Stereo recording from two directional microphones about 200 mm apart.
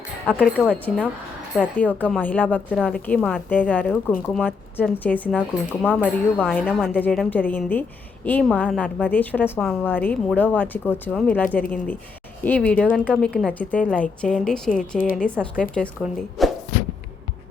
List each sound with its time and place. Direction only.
0.3 s a woman's voice: 5° left (ahead or behind)
5.4 s speech: 5° right (ahead or behind)
6.4 s a woman's voice: 5° left (ahead or behind)
14.7 s speech: 45° left (ahead or behind)
15.1 s speech: 5° left (ahead or behind)
16.4 s a sound: centre (ahead or behind)